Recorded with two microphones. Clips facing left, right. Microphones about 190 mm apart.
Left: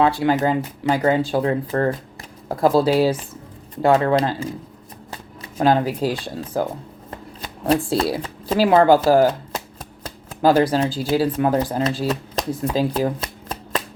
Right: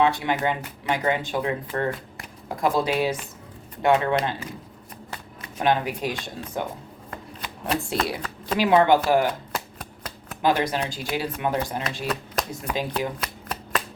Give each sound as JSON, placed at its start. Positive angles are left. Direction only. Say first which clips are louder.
{"t": 0.0, "sound": "speech", "louder": "left 5 dB", "side_deg": 35}
{"t": 7.7, "sound": "speech", "louder": "left 7 dB", "side_deg": 30}
{"t": 10.4, "sound": "speech", "louder": "left 7 dB", "side_deg": 35}